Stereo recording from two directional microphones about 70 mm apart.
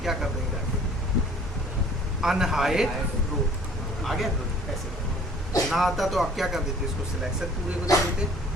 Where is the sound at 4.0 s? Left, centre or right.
Centre.